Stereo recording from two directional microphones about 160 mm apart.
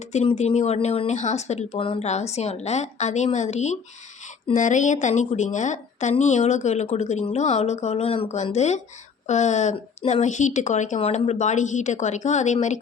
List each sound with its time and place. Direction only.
0.1 s a woman's voice: 45° left (ahead or behind)